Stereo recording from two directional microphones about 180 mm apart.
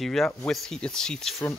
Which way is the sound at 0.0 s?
Centre (ahead or behind).